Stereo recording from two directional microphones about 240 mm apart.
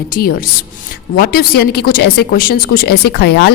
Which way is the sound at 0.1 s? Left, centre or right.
Left.